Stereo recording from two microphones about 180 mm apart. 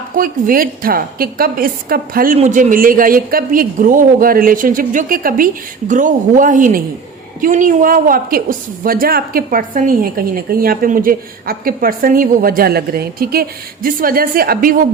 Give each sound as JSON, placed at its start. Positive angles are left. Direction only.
{"t": 0.2, "sound": "a woman's voice", "side_deg": -50}